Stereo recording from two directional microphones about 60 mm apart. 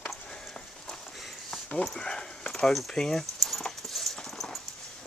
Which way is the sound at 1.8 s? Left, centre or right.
Centre.